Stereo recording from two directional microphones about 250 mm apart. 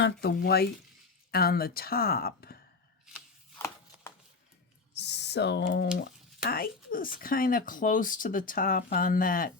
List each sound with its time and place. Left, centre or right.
0.0 s speech: left
4.9 s speech: left